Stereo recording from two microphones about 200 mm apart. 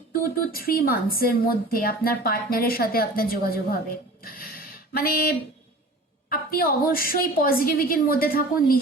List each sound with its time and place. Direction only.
0.1 s speech: 45° left (ahead or behind)
4.2 s a sound: 45° left (ahead or behind)
6.3 s speech: 45° left (ahead or behind)